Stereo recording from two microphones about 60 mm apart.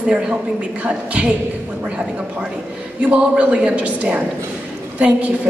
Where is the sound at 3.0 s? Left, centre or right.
Right.